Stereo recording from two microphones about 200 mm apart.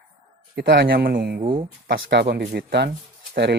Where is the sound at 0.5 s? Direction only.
55° right (ahead or behind).